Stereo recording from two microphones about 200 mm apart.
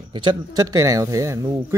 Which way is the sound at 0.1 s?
25° right (ahead or behind).